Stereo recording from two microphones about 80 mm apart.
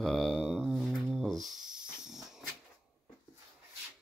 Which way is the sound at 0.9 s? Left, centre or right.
Centre.